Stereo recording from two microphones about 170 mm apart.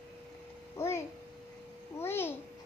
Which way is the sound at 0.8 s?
15° left (ahead or behind).